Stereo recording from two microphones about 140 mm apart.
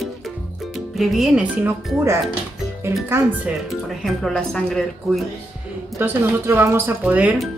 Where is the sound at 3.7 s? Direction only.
Centre (ahead or behind).